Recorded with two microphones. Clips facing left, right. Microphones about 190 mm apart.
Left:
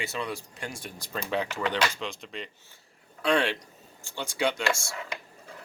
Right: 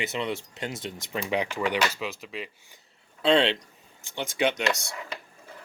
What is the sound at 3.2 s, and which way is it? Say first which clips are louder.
Speech: right 4 dB; 25° right (ahead or behind).